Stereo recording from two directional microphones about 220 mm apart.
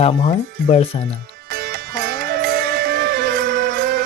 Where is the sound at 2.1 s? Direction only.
45° right (ahead or behind).